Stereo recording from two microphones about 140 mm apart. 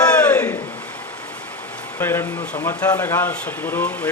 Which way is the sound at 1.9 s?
15° left (ahead or behind).